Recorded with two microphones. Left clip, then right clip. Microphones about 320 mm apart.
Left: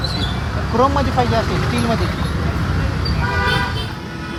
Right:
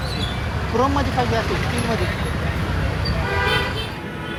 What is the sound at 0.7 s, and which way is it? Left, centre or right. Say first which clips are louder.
Speech: left 4 dB; left.